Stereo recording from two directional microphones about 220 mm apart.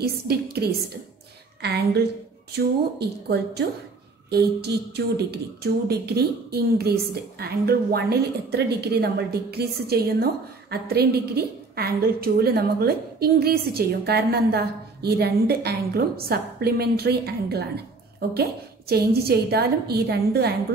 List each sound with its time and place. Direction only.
0.0 s a woman's voice: 45° right (ahead or behind)
2.5 s a woman's voice: 45° right (ahead or behind)
18.9 s a woman's voice: 45° right (ahead or behind)